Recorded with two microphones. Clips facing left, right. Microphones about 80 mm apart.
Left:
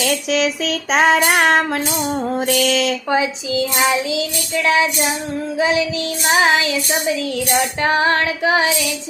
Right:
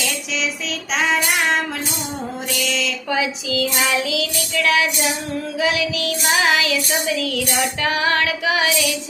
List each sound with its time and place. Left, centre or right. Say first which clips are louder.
0.0 s child singing: left 7 dB; left
3.1 s child singing: left 3 dB; left